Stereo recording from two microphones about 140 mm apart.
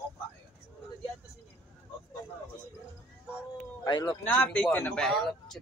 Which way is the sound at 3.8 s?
30° left (ahead or behind).